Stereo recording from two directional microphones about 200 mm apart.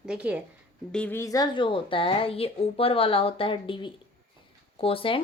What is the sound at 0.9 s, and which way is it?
Speech, 10° left (ahead or behind).